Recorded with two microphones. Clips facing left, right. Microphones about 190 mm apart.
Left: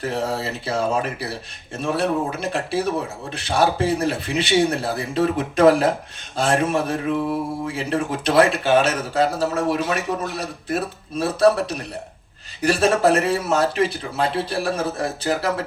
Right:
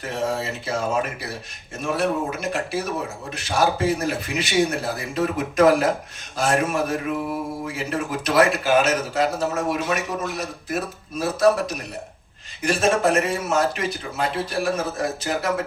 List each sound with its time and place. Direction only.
0.0 s a man's voice: 35° left (ahead or behind)